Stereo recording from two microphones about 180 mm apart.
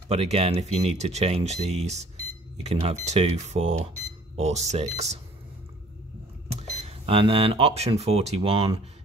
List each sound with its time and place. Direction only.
0.1 s speech: 35° right (ahead or behind)
6.8 s speech: 35° right (ahead or behind)